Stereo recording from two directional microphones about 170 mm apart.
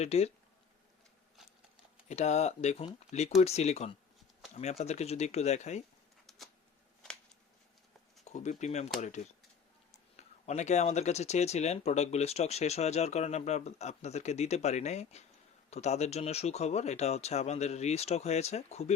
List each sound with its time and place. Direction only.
0.0 s speech: 40° left (ahead or behind)
2.0 s speech: 40° left (ahead or behind)
6.2 s a sound: centre (ahead or behind)
8.2 s speech: 40° left (ahead or behind)